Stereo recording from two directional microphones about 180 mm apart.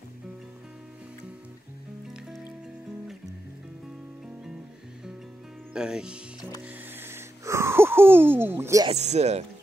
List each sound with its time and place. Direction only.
5.7 s speech: 5° right (ahead or behind)
7.0 s a sound: 15° right (ahead or behind)
8.8 s speech: 40° right (ahead or behind)